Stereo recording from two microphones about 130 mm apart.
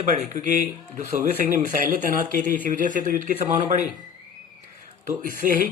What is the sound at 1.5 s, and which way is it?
Speech, 90° right.